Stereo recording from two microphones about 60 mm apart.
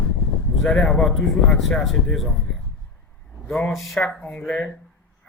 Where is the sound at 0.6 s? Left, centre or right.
Centre.